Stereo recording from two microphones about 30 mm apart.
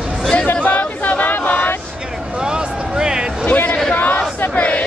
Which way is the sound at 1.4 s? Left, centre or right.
Left.